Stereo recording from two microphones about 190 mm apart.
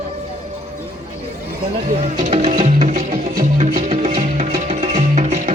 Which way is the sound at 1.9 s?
40° right (ahead or behind).